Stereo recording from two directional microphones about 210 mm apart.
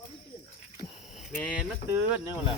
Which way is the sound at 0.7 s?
25° left (ahead or behind).